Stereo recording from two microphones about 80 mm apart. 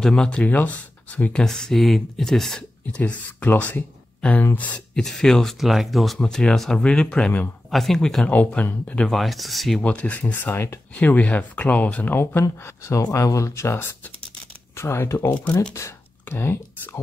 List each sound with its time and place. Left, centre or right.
0.0 s speech: centre
3.0 s speech: left
4.9 s speech: centre
6.1 s speech: centre
8.3 s speech: centre
9.1 s speech: centre
9.8 s speech: centre; by 17.0 s left